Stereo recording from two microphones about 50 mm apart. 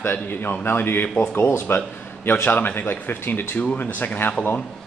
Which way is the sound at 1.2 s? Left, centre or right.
Left.